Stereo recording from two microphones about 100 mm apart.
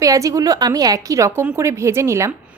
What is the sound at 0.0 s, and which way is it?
Speech, 35° right (ahead or behind).